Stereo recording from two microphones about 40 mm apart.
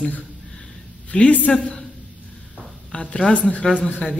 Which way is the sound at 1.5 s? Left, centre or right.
Centre.